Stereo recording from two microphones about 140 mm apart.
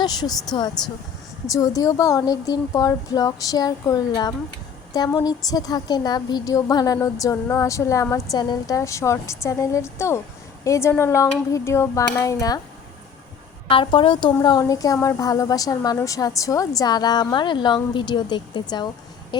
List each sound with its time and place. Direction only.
0.0 s a woman's voice: 30° left (ahead or behind)
1.5 s a woman's voice: 25° left (ahead or behind)
13.7 s a woman's voice: 40° left (ahead or behind)